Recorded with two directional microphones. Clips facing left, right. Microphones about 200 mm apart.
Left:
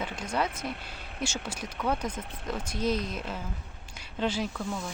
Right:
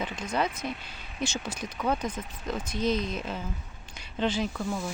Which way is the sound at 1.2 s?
10° left (ahead or behind).